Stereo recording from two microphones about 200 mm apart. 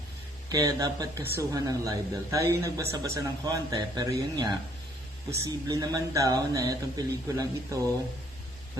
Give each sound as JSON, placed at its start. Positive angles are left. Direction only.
{"t": 0.5, "sound": "speech", "side_deg": -20}